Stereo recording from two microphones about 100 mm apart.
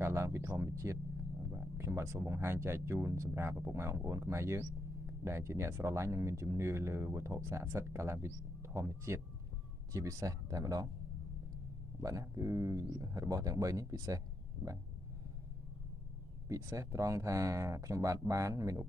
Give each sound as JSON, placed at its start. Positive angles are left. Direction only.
{"t": 0.0, "sound": "speech", "side_deg": -30}
{"t": 12.0, "sound": "speech", "side_deg": -35}
{"t": 16.4, "sound": "speech", "side_deg": -30}